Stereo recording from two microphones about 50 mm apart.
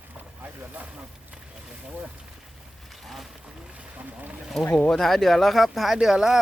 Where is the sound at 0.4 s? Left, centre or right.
Right.